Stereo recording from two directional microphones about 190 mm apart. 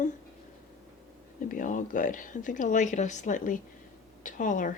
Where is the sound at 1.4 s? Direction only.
45° left (ahead or behind).